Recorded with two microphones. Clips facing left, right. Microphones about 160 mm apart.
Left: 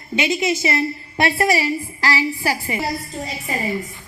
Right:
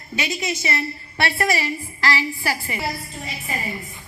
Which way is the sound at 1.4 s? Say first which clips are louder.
Left 4 dB; 15° left (ahead or behind).